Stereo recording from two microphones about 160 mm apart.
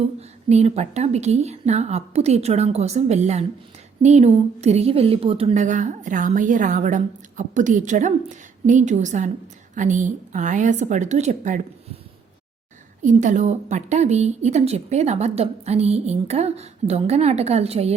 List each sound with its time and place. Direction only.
0.2 s a woman's voice: 45° right (ahead or behind)
13.0 s a woman's voice: 50° right (ahead or behind)